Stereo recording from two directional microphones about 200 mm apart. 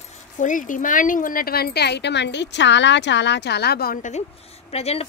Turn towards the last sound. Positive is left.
turn(degrees=30)  # may be behind; listen again after turning